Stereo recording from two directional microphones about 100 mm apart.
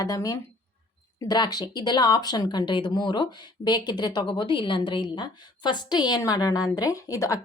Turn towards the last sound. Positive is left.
turn(degrees=35)  # may be behind; listen again after turning